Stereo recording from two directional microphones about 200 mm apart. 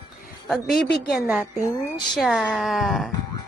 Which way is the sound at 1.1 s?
5° right (ahead or behind).